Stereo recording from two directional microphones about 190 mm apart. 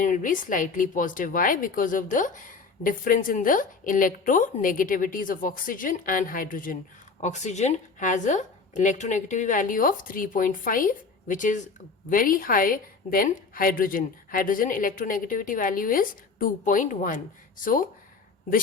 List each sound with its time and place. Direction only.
0.0 s a woman's voice: 45° left (ahead or behind)